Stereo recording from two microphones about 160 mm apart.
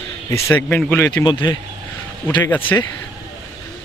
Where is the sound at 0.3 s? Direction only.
15° left (ahead or behind).